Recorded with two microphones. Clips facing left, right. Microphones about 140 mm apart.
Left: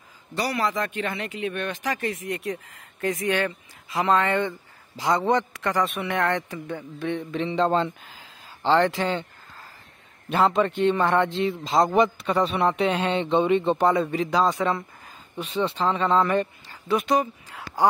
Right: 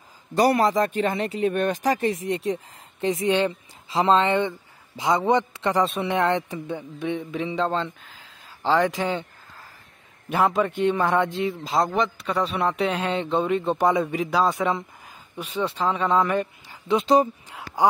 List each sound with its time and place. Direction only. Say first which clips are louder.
0.3 s speech: right 7 dB; 45° right (ahead or behind)
2.0 s speech: right 5 dB; 30° right (ahead or behind); by 9.0 s 5° right (ahead or behind)
10.3 s a man's voice: left 1 dB; 10° right (ahead or behind)
16.8 s speech: right 3 dB; 25° right (ahead or behind)
17.5 s a sound: right 1 dB; 15° right (ahead or behind)